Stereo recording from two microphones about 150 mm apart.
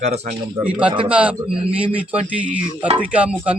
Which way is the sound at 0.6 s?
10° right (ahead or behind).